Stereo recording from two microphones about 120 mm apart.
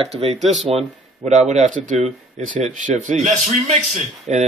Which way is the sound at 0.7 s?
70° right (ahead or behind).